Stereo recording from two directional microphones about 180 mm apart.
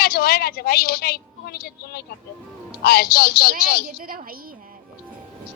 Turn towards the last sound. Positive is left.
turn(degrees=-55)  # may be behind; listen again after turning